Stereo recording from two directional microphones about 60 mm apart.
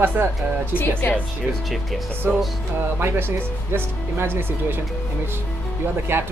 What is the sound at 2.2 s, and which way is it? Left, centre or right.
Speech, right.